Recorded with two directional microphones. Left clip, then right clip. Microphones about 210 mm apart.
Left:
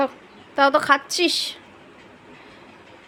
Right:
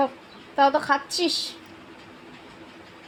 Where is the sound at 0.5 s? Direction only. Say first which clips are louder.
Left 3 dB; 20° left (ahead or behind).